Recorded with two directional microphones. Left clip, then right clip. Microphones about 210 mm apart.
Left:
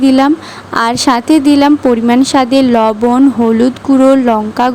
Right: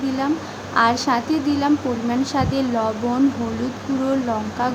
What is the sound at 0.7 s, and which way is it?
Speech, 45° left (ahead or behind).